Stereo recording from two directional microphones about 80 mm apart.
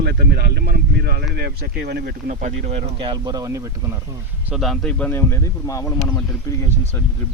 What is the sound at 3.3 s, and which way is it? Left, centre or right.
Speech, right.